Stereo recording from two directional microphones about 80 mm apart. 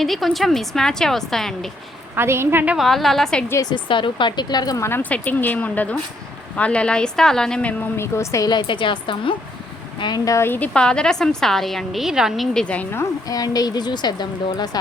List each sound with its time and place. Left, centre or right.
0.0 s a woman's voice: centre
2.1 s a woman's voice: right
2.7 s a woman's voice: centre
3.8 s a woman's voice: left
4.8 s a woman's voice: left
7.9 s a woman's voice: left
8.4 s a woman's voice: left
10.0 s speech: left
10.4 s speech: left
10.8 s a woman's voice: centre
12.5 s a woman's voice: centre
13.2 s speech: left